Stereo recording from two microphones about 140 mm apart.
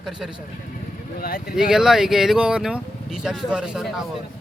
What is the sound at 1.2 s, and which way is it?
Speech, 90° left.